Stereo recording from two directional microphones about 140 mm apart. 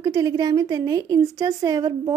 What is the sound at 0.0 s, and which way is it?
A woman's voice, 25° right (ahead or behind).